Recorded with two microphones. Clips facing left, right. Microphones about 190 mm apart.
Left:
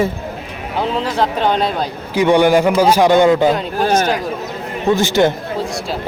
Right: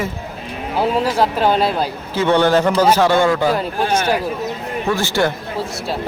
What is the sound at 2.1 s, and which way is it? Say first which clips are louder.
A man's voice: left 3 dB; 15° left (ahead or behind).